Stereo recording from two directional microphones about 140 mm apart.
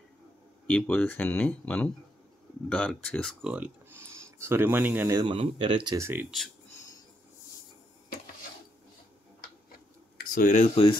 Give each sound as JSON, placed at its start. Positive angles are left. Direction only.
{"t": 0.7, "sound": "speech", "side_deg": 10}
{"t": 3.4, "sound": "speech", "side_deg": -10}
{"t": 5.1, "sound": "speech", "side_deg": -35}
{"t": 5.9, "sound": "speech", "side_deg": -20}
{"t": 10.1, "sound": "speech", "side_deg": 85}